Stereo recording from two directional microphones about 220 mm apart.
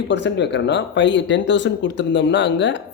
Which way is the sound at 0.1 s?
50° left (ahead or behind).